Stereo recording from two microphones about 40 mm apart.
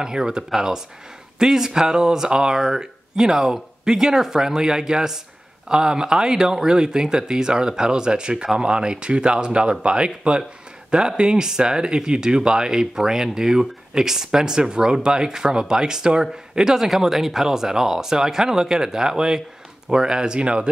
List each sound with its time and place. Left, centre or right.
0.0 s speech: centre